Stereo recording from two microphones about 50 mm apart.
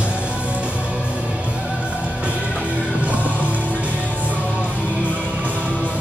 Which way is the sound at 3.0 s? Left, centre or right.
Right.